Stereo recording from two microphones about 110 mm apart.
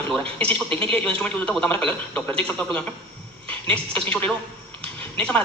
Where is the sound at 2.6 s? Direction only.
10° left (ahead or behind).